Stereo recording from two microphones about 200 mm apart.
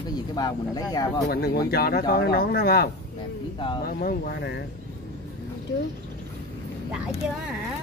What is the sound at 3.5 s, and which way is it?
Speech, 25° left (ahead or behind).